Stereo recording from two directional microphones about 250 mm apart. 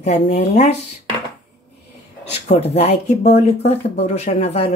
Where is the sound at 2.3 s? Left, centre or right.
Left.